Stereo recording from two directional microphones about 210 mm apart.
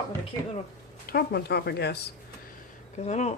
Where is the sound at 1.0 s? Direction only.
50° left (ahead or behind).